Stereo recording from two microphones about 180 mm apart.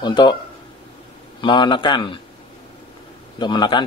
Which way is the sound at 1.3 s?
25° left (ahead or behind).